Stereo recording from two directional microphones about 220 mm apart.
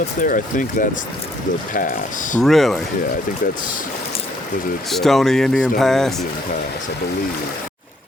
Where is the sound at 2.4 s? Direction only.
Centre (ahead or behind).